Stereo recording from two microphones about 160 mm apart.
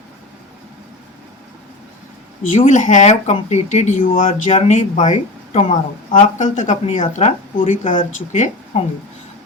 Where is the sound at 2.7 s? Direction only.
50° left (ahead or behind).